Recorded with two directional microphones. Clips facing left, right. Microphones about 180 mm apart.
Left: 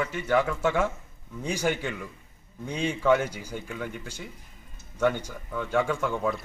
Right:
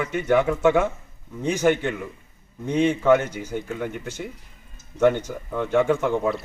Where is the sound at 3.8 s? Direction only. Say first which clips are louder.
Right 6 dB; 60° right (ahead or behind).